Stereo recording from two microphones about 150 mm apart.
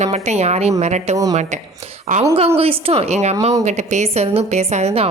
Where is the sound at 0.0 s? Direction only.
50° right (ahead or behind).